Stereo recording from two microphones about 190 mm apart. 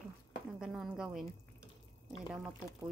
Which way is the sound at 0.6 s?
Centre (ahead or behind).